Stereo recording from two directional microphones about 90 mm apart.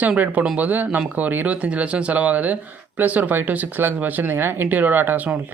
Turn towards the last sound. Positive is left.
turn(degrees=-15)  # may be behind; listen again after turning